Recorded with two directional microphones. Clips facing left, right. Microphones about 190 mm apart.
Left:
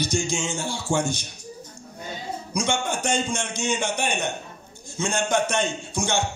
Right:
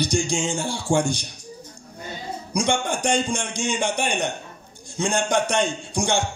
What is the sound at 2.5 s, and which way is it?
A man's voice, 15° right (ahead or behind).